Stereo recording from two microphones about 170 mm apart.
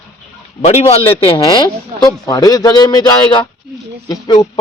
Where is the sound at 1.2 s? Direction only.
30° left (ahead or behind).